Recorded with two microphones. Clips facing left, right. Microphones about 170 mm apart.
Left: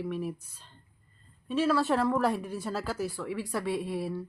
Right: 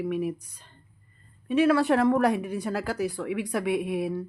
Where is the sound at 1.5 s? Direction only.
60° right (ahead or behind).